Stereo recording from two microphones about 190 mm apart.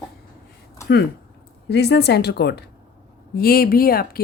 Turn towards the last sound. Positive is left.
turn(degrees=50)  # may be behind; listen again after turning